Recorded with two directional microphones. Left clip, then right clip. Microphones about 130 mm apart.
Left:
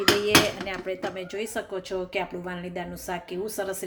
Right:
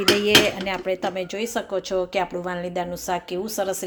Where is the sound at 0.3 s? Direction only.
30° right (ahead or behind).